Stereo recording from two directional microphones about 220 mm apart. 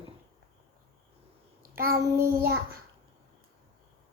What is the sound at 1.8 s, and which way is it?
Child singing, 40° right (ahead or behind).